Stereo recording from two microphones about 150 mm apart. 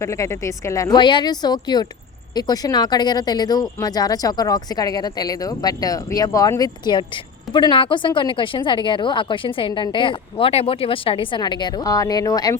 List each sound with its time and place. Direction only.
0.0 s speech: 20° left (ahead or behind)